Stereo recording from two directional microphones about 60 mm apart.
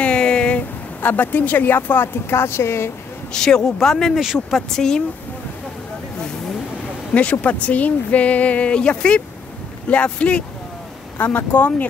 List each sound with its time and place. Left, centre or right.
0.0 s speech: centre; by 2.9 s left
3.3 s speech: centre
4.2 s speech: centre
7.2 s speech: left
11.1 s speech: left